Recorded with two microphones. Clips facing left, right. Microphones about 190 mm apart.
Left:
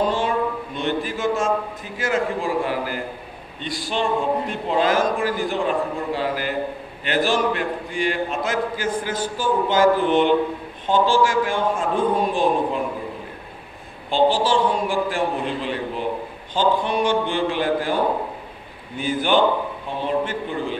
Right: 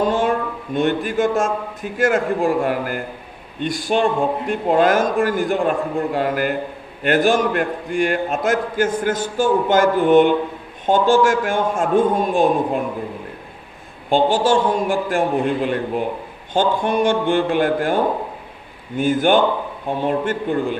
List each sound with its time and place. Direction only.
0.0 s a sound: 50° right (ahead or behind)
0.7 s a man's voice: 50° right (ahead or behind)
14.1 s a man's voice: 50° right (ahead or behind)
18.9 s a man's voice: 50° right (ahead or behind)